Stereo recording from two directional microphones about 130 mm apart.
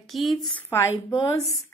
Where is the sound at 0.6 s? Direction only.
20° left (ahead or behind).